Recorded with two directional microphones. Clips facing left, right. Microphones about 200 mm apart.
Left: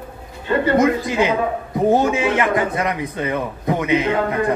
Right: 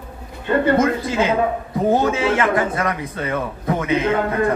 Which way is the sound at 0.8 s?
15° left (ahead or behind).